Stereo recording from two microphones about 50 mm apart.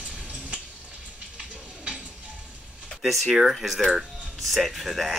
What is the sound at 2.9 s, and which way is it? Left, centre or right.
Speech, centre.